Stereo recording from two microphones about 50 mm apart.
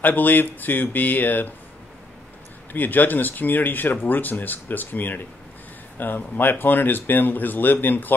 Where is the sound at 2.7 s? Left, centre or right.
Left.